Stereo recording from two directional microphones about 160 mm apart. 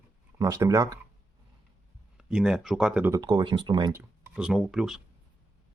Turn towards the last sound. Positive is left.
turn(degrees=0)  # may be behind; listen again after turning